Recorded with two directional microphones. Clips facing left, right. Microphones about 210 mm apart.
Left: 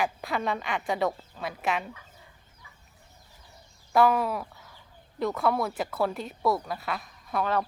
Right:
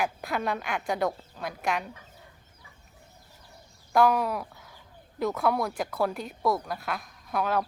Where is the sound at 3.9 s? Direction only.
Centre (ahead or behind).